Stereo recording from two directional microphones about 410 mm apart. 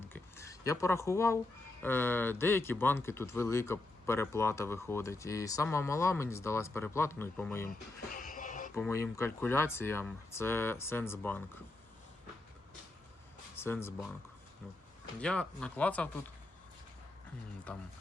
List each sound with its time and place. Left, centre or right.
0.0 s a sound: centre
1.8 s speech: centre
8.1 s music: centre
8.7 s speech: centre
13.6 s speech: centre
15.2 s speech: centre
17.7 s speech: centre